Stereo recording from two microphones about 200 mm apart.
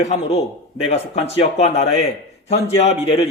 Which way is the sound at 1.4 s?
35° left (ahead or behind).